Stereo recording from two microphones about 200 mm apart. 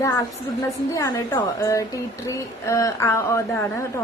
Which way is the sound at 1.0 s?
15° left (ahead or behind).